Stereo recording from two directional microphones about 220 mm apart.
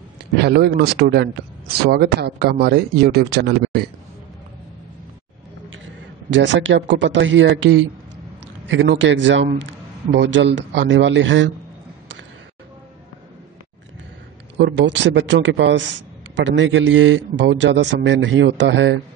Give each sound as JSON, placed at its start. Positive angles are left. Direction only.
{"t": 0.4, "sound": "speech", "side_deg": -50}
{"t": 6.3, "sound": "a man's voice", "side_deg": -55}
{"t": 14.6, "sound": "a man's voice", "side_deg": -55}